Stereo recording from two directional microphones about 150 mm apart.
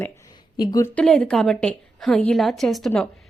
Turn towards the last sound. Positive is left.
turn(degrees=0)  # may be behind; listen again after turning